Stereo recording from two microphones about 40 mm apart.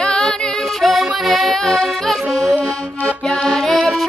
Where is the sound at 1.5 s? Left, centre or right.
Centre.